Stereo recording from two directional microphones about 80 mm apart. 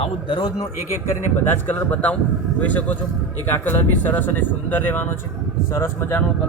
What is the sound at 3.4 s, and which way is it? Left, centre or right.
Speech, left.